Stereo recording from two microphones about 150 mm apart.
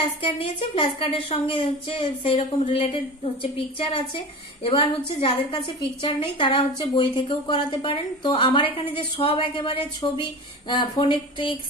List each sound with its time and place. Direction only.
0.2 s a woman's voice: 35° left (ahead or behind)
4.6 s a woman's voice: 35° left (ahead or behind)